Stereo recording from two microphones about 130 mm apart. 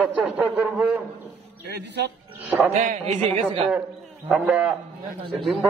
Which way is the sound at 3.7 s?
10° right (ahead or behind).